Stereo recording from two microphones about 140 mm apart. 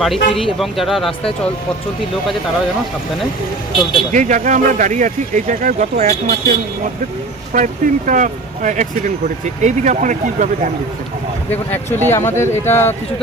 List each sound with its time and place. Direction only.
0.0 s speech: centre (ahead or behind)
4.1 s speech: 65° right (ahead or behind); by 6.6 s 90° right
7.5 s speech: 70° right (ahead or behind)
11.5 s speech: 15° left (ahead or behind)